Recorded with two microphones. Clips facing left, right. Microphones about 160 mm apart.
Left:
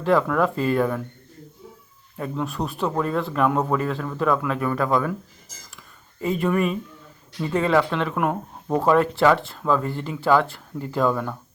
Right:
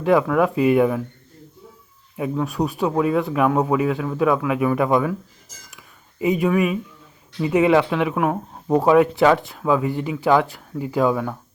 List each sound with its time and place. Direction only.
0.0 s speech: 10° right (ahead or behind)
2.1 s speech: 10° right (ahead or behind)
6.1 s speech: 10° right (ahead or behind)